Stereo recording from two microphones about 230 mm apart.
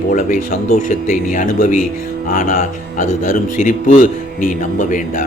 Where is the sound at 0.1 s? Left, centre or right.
Left.